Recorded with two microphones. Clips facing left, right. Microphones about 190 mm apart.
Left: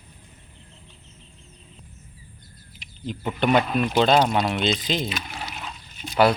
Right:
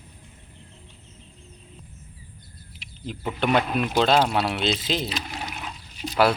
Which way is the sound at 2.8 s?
Centre (ahead or behind).